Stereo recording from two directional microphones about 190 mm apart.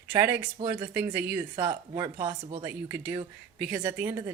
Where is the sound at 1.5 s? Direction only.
25° right (ahead or behind).